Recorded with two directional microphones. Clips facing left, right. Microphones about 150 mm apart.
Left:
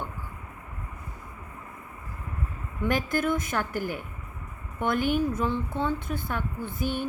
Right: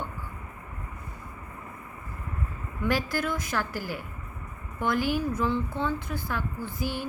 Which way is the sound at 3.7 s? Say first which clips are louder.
Left 3 dB; 55° left (ahead or behind).